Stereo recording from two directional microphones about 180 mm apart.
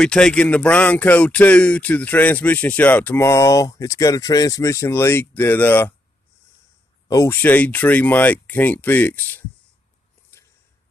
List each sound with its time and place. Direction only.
0.0 s speech: 5° left (ahead or behind)
7.1 s speech: 15° left (ahead or behind)
10.3 s a sound: 15° left (ahead or behind)